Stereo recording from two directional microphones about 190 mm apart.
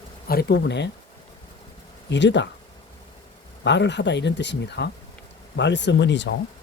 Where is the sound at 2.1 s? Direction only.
65° left (ahead or behind).